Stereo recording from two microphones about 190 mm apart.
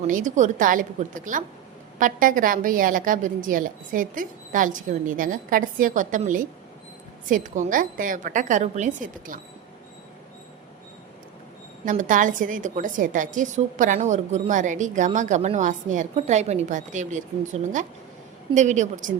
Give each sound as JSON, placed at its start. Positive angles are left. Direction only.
{"t": 0.1, "sound": "a woman's voice", "side_deg": -40}
{"t": 11.9, "sound": "a woman's voice", "side_deg": -45}